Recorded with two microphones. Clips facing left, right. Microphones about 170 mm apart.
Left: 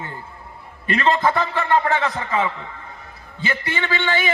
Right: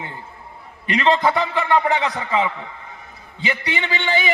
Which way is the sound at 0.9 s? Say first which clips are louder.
Right 1 dB; 15° right (ahead or behind).